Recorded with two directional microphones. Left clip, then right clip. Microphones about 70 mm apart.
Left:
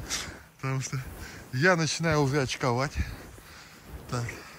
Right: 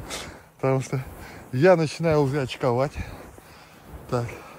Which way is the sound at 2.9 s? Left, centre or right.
Right.